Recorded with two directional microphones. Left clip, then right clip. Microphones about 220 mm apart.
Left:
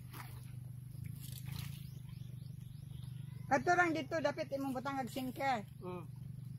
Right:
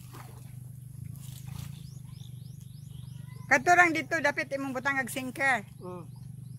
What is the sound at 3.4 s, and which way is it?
Speech, 25° right (ahead or behind).